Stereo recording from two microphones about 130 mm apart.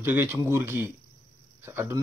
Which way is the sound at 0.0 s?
15° right (ahead or behind).